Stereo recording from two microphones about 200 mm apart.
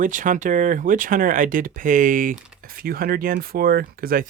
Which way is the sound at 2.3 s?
5° right (ahead or behind).